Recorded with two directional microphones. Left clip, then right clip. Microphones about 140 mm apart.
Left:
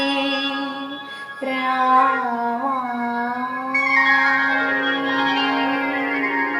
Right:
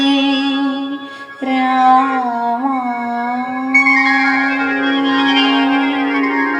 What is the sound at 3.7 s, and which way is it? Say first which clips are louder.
Music: right 5 dB; 50° right (ahead or behind).